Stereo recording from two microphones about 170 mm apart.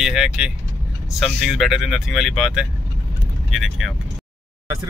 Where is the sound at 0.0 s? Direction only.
5° right (ahead or behind).